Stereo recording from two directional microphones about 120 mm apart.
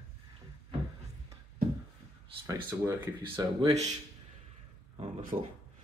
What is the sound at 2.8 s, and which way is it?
Speech, 20° right (ahead or behind).